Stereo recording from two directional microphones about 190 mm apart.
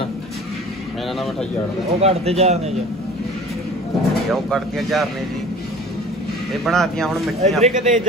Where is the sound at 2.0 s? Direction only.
35° right (ahead or behind).